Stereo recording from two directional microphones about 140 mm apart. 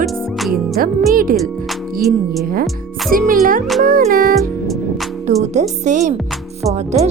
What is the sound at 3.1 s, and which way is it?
Speech, 90° right.